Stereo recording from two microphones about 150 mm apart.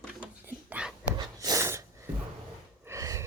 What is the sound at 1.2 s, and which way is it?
Snort, 25° right (ahead or behind).